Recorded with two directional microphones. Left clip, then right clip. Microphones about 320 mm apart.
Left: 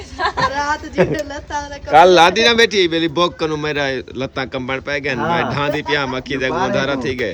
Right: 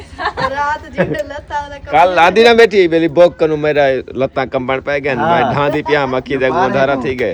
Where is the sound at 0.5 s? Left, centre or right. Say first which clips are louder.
Right 3 dB; left.